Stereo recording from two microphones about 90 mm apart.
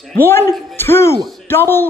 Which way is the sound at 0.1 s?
25° left (ahead or behind).